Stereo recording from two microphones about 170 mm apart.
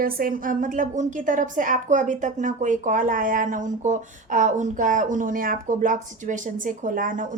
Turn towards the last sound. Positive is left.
turn(degrees=-50)  # may be behind; listen again after turning